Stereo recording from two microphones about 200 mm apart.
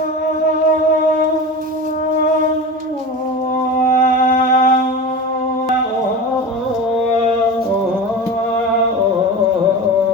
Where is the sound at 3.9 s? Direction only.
40° left (ahead or behind).